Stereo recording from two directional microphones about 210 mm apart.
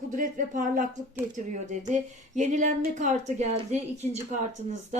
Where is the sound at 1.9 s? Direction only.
35° right (ahead or behind).